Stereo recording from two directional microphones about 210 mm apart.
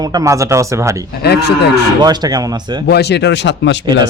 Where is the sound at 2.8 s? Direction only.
50° left (ahead or behind).